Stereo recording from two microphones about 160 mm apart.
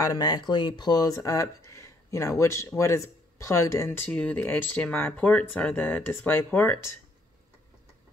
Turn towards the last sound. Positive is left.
turn(degrees=15)  # may be behind; listen again after turning